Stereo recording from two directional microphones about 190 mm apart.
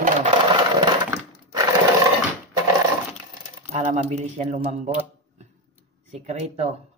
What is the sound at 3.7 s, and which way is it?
Speech, 35° right (ahead or behind).